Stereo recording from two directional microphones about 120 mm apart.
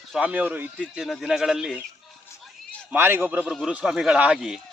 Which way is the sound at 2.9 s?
20° right (ahead or behind).